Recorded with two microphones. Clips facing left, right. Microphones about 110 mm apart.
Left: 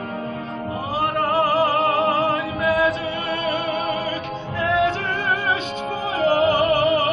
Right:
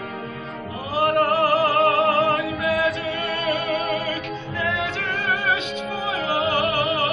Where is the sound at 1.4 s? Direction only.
30° left (ahead or behind).